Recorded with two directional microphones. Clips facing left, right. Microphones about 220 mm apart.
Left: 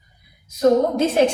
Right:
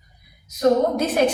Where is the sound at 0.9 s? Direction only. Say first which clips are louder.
Left 3 dB; 25° left (ahead or behind).